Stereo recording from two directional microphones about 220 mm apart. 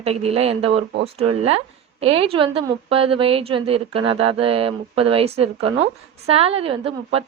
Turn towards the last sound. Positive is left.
turn(degrees=-25)  # may be behind; listen again after turning